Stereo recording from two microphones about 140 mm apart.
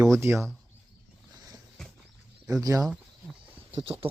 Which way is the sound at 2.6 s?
25° right (ahead or behind).